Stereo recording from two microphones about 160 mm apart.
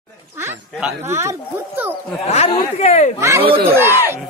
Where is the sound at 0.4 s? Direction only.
15° right (ahead or behind).